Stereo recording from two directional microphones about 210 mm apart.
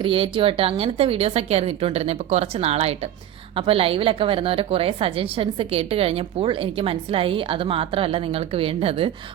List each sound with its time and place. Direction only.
0.0 s a woman's voice: 25° right (ahead or behind)